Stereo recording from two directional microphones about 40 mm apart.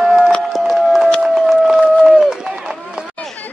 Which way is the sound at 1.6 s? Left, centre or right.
Centre.